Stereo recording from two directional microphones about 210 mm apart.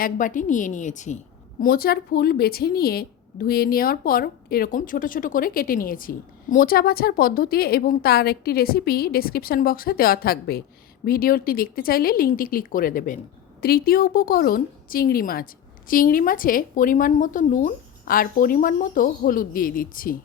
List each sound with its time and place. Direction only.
0.0 s a woman's voice: 40° left (ahead or behind)